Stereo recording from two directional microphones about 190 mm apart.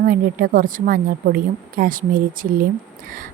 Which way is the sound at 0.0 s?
50° right (ahead or behind).